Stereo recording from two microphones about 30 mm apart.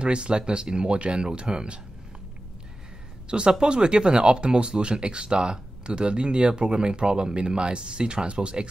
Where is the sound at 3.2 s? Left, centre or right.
Right.